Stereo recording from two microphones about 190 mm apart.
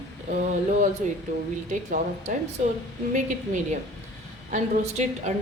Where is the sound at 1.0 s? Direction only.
40° right (ahead or behind).